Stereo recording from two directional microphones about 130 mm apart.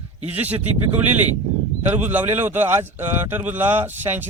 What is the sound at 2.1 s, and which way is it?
Speech, 15° right (ahead or behind).